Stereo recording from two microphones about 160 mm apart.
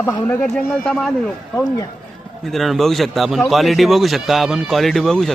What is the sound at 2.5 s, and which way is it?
A man's voice, centre (ahead or behind).